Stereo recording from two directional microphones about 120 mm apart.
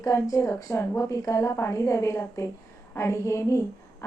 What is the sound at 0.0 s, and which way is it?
A woman's voice, 25° left (ahead or behind).